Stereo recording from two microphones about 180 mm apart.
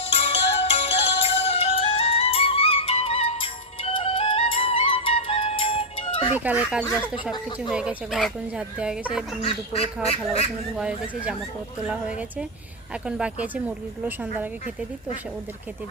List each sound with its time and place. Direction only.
0.0 s music: 30° left (ahead or behind)
6.3 s speech: 10° right (ahead or behind)
9.4 s duck: 35° left (ahead or behind)
10.8 s speech: 5° right (ahead or behind)